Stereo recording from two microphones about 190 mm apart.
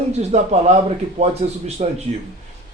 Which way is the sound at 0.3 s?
35° right (ahead or behind).